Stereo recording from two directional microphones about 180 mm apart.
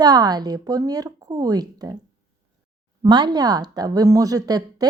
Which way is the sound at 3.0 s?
25° right (ahead or behind).